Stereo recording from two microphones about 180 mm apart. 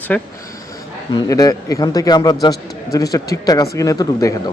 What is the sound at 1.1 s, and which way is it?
A man's voice, 20° left (ahead or behind).